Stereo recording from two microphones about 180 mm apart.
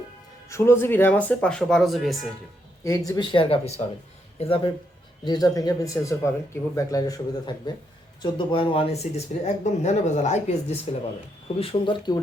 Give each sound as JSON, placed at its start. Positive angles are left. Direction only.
{"t": 0.4, "sound": "speech", "side_deg": 15}
{"t": 2.8, "sound": "speech", "side_deg": 20}
{"t": 11.6, "sound": "speech", "side_deg": 30}